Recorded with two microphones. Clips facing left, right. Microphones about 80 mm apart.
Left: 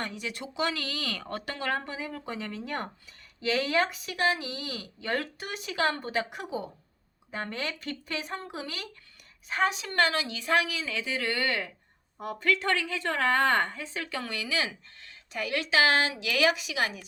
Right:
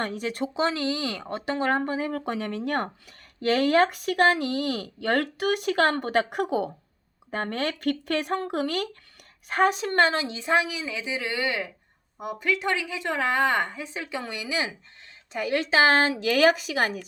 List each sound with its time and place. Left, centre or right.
0.0 s a woman's voice: right